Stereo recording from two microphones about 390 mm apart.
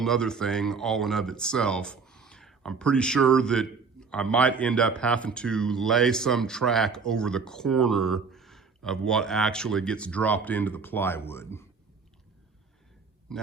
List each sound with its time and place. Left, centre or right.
0.0 s speech: centre
13.3 s a man's voice: centre